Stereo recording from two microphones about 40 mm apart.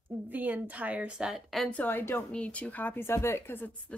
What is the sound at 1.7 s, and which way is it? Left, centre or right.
Speech, left.